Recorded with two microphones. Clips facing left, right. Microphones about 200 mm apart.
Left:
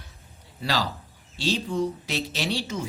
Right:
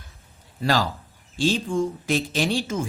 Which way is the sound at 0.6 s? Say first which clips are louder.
Right 5 dB; 50° right (ahead or behind).